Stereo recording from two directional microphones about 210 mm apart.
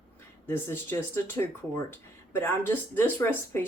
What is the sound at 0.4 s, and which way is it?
Speech, 10° left (ahead or behind).